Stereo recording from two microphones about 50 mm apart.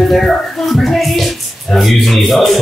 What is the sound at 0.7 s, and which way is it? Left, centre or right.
Speech, centre.